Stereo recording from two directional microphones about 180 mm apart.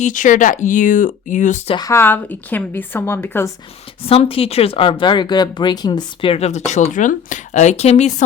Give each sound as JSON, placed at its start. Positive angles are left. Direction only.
{"t": 0.0, "sound": "speech", "side_deg": 45}
{"t": 1.7, "sound": "a woman's voice", "side_deg": 20}
{"t": 4.0, "sound": "speech", "side_deg": 30}